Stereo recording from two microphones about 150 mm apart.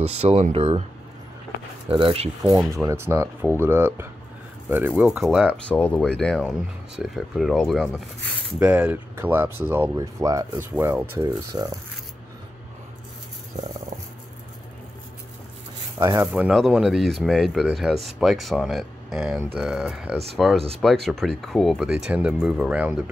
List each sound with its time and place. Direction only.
0.0 s speech: 45° right (ahead or behind)
1.9 s speech: 35° right (ahead or behind)
2.7 s speech: 20° right (ahead or behind)
5.6 s speech: 10° left (ahead or behind); by 11.8 s 25° right (ahead or behind)
16.2 s speech: 10° right (ahead or behind)